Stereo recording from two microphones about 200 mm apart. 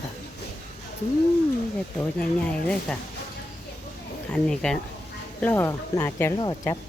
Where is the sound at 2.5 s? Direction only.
5° left (ahead or behind).